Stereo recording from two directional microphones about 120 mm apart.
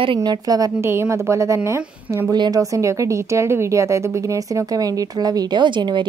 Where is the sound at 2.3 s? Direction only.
35° right (ahead or behind).